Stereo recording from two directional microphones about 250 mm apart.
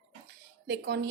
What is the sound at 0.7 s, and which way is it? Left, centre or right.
Speech, right.